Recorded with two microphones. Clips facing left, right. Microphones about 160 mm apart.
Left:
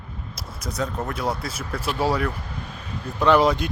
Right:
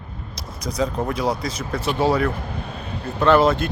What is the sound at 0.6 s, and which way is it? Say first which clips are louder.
Speech: right 5 dB; centre (ahead or behind).